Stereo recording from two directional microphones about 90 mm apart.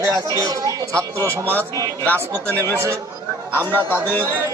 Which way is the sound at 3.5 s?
25° left (ahead or behind).